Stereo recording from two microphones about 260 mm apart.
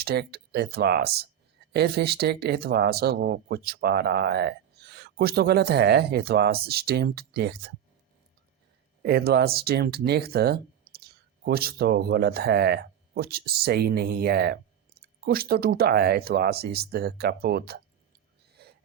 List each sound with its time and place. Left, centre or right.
0.0 s speech: right
9.0 s speech: right
18.6 s a sound: right